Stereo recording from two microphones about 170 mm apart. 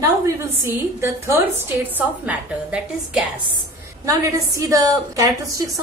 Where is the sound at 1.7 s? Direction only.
10° right (ahead or behind).